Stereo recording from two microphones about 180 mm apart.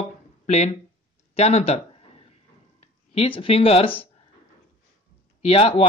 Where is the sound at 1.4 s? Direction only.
35° left (ahead or behind).